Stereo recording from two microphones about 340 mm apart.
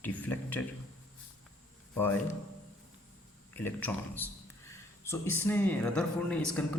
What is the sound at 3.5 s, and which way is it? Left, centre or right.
Speech, centre.